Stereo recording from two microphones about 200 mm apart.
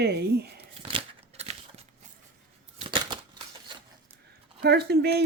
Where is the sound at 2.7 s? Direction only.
25° right (ahead or behind).